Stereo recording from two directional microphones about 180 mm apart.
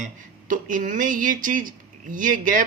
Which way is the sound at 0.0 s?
50° right (ahead or behind).